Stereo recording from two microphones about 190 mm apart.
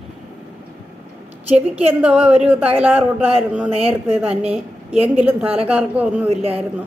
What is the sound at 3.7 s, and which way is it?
A woman's voice, 30° right (ahead or behind).